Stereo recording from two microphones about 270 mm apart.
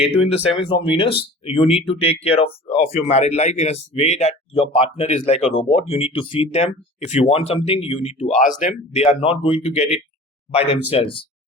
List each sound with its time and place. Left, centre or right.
0.1 s speech: left